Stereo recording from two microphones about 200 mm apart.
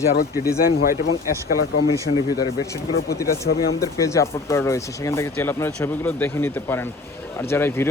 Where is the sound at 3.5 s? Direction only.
50° left (ahead or behind).